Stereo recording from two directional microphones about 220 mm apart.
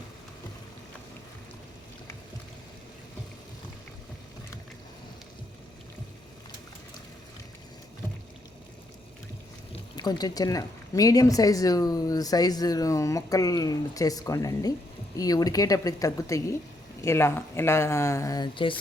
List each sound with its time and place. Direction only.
9.9 s speech: 20° left (ahead or behind)